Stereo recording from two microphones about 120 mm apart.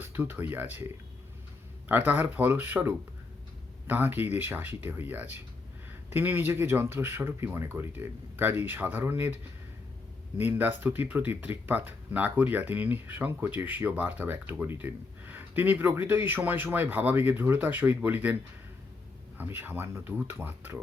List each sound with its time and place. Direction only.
0.0 s speech: 20° right (ahead or behind)
1.9 s speech: 15° right (ahead or behind)
19.4 s speech: 15° right (ahead or behind)